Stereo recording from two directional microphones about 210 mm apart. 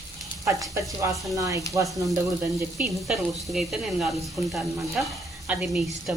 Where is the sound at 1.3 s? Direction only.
15° right (ahead or behind).